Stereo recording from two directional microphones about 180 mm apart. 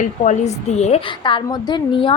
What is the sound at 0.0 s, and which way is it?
Speech, 40° left (ahead or behind).